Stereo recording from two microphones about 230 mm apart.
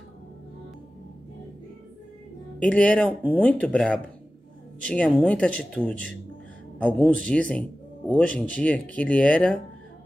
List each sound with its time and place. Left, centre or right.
2.6 s speech: centre